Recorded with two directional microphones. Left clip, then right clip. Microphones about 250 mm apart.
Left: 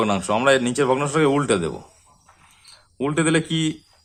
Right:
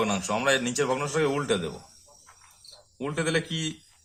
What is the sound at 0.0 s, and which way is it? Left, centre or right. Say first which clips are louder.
A man's voice: left 7 dB; left.